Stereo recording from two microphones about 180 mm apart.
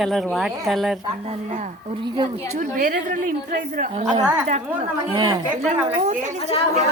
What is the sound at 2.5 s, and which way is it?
A woman's voice, 50° right (ahead or behind).